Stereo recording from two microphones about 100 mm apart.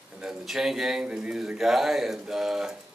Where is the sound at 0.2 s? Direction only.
5° right (ahead or behind).